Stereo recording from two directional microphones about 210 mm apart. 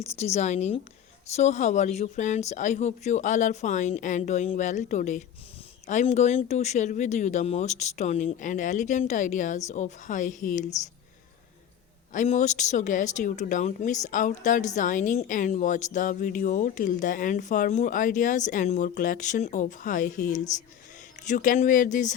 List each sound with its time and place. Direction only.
0.2 s speech: 30° left (ahead or behind)
12.1 s speech: 35° left (ahead or behind)